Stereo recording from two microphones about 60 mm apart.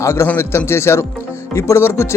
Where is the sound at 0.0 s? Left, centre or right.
Left.